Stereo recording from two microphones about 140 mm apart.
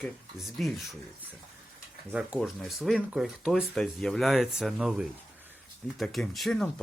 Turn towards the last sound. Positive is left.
turn(degrees=5)  # may be behind; listen again after turning